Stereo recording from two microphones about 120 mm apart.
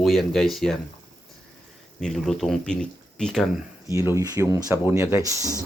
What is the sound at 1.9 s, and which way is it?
Speech, centre (ahead or behind).